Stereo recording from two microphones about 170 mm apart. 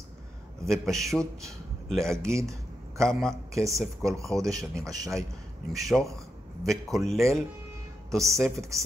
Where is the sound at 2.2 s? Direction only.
15° right (ahead or behind).